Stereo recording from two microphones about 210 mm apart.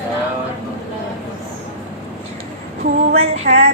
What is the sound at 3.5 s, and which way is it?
Speech, 45° right (ahead or behind).